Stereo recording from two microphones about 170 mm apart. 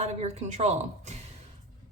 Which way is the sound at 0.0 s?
40° right (ahead or behind).